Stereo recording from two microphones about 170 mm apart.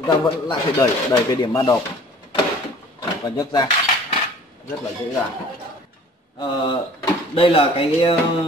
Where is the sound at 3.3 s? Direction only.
25° left (ahead or behind).